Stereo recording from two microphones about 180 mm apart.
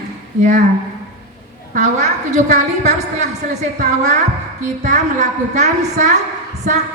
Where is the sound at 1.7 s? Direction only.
40° right (ahead or behind).